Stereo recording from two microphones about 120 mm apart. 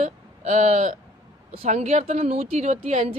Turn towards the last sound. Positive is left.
turn(degrees=-75)  # may be behind; listen again after turning